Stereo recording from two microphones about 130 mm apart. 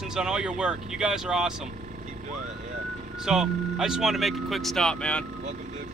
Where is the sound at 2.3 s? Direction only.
65° right (ahead or behind).